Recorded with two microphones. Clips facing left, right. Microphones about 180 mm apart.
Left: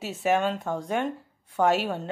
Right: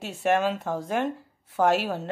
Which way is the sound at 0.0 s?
Centre (ahead or behind).